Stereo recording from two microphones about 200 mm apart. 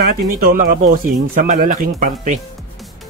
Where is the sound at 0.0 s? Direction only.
45° right (ahead or behind).